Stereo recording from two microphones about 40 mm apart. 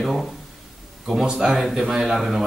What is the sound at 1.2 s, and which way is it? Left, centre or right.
A man's voice, centre.